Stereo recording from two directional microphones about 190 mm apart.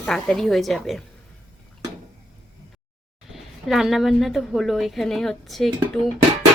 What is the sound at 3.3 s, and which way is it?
A woman's voice, centre (ahead or behind).